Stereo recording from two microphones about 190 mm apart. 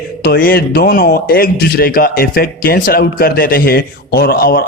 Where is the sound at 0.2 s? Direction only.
50° left (ahead or behind).